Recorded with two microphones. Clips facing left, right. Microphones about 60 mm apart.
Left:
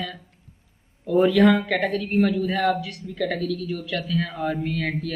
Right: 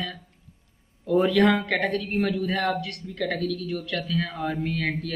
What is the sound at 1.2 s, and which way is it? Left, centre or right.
A man's voice, centre.